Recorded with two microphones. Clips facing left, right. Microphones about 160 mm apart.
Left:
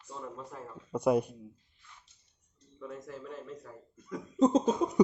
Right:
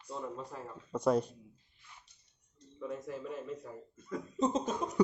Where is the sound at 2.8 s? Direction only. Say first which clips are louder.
Right 3 dB; 5° right (ahead or behind).